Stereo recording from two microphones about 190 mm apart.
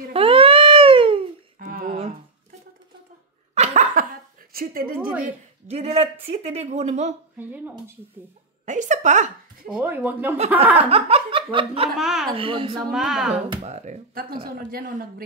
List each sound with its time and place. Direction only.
0.1 s a sound: 30° right (ahead or behind)
1.6 s a sound: 45° right (ahead or behind)
3.5 s a sound: 35° right (ahead or behind)
4.5 s speech: 50° right (ahead or behind)
5.2 s speech: 35° right (ahead or behind)
6.2 s laughter: 30° right (ahead or behind)
7.3 s speech: 10° right (ahead or behind)
8.6 s speech: 40° right (ahead or behind)
9.8 s speech: 10° right (ahead or behind)
10.8 s laughter: 30° right (ahead or behind)
12.0 s speech: centre (ahead or behind)
12.4 s a woman's voice: 30° right (ahead or behind)
12.9 s speech: centre (ahead or behind)
13.5 s speech: 35° right (ahead or behind)